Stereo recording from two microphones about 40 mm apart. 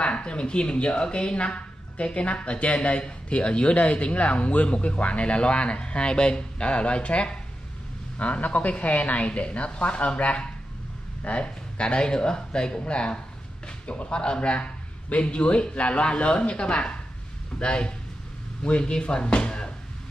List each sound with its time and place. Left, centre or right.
0.0 s a woman's voice: left